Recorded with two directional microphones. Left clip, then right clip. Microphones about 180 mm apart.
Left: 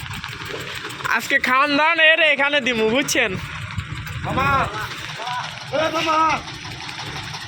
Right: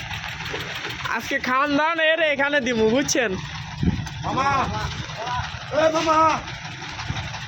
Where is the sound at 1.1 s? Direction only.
10° right (ahead or behind).